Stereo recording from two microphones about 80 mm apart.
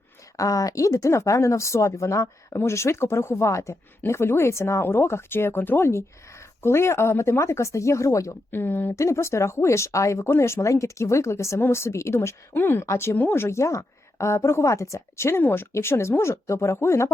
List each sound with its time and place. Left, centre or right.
0.3 s speech: left
8.5 s speech: left
9.0 s speech: left